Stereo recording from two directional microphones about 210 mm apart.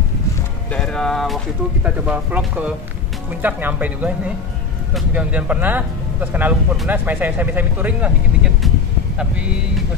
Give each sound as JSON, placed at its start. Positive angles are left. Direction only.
{"t": 0.7, "sound": "speech", "side_deg": 5}